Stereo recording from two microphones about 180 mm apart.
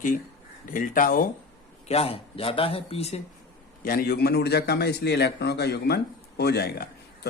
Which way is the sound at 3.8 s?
55° left (ahead or behind).